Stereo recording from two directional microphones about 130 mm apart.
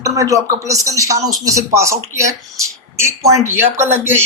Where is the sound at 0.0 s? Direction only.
25° right (ahead or behind).